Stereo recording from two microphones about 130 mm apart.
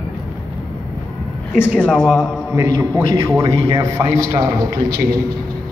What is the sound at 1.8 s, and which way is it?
Speech, 5° left (ahead or behind).